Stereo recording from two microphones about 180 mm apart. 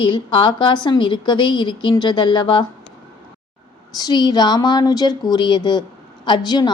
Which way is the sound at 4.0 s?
20° left (ahead or behind).